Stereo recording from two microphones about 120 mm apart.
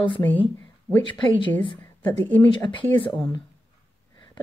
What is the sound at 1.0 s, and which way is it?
Speech, 45° left (ahead or behind).